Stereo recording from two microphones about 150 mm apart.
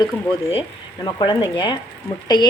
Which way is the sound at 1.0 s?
30° left (ahead or behind).